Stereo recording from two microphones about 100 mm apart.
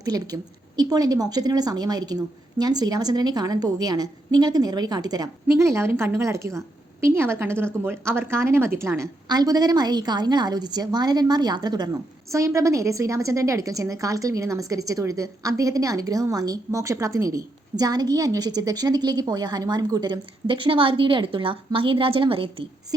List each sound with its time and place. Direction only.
0.0 s a woman's voice: 40° right (ahead or behind)
5.5 s a woman's voice: 25° right (ahead or behind)
9.3 s a woman's voice: 45° right (ahead or behind)
12.3 s a woman's voice: 30° right (ahead or behind); by 22.6 s 65° right (ahead or behind)